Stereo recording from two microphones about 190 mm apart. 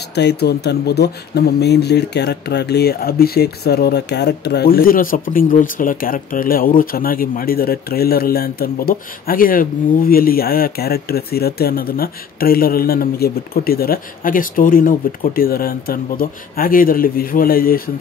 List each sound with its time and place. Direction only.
0.1 s speech: 60° left (ahead or behind)